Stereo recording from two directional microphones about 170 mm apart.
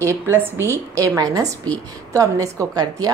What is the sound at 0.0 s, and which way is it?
A woman's voice, 15° right (ahead or behind).